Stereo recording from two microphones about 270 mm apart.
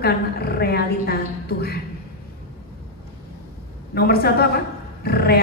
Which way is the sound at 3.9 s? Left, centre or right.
Left.